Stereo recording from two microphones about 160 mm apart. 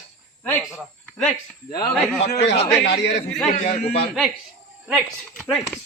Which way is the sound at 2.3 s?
90° left.